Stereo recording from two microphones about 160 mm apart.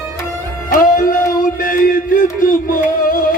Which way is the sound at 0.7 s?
60° left (ahead or behind).